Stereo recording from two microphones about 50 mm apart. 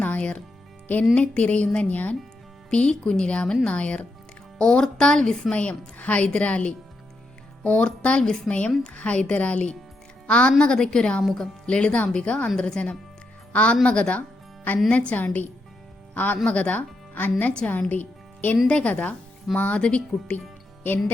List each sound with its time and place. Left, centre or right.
0.0 s music: left
1.1 s a woman's voice: left
2.6 s a woman's voice: centre
5.5 s a woman's voice: left
14.2 s music: left
14.8 s a woman's voice: left
17.7 s speech: left
18.7 s a woman's voice: left